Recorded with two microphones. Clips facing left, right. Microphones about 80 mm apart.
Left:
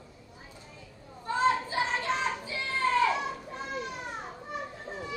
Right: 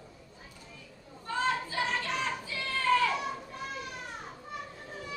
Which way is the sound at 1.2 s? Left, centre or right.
Left.